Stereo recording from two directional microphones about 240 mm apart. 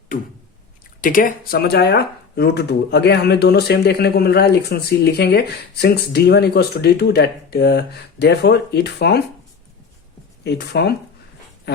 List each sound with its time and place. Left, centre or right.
1.0 s speech: left
10.4 s speech: left